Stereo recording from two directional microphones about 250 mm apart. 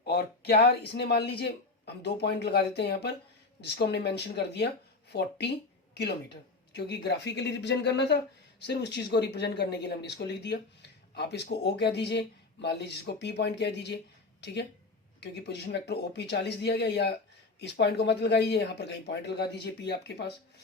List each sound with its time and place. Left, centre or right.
0.0 s a man's voice: left